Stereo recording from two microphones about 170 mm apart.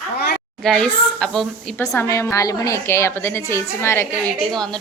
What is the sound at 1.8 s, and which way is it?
A woman's voice, 15° left (ahead or behind).